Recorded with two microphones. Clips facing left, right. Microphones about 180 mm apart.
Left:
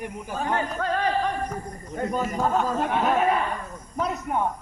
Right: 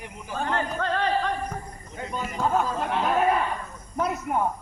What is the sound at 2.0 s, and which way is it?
Speech, 45° left (ahead or behind).